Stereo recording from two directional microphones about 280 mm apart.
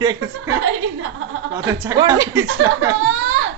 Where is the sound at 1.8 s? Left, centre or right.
Centre.